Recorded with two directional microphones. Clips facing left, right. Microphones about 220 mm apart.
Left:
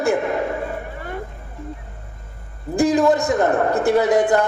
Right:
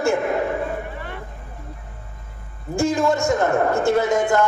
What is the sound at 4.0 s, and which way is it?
Speech, 35° left (ahead or behind).